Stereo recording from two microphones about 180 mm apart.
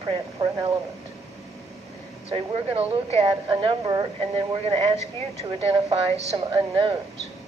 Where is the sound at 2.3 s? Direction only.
35° right (ahead or behind).